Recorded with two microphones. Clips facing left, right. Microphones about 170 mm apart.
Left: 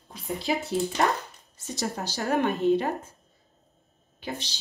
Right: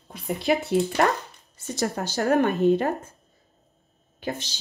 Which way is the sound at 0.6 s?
65° right (ahead or behind).